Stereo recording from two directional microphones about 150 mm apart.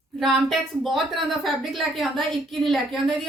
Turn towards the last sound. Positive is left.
turn(degrees=0)  # may be behind; listen again after turning